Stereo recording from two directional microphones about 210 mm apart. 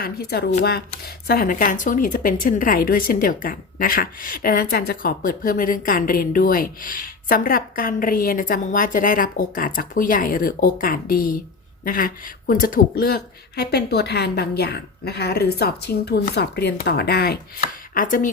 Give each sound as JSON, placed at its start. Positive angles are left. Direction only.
{"t": 0.0, "sound": "speech", "side_deg": 50}
{"t": 17.9, "sound": "speech", "side_deg": 40}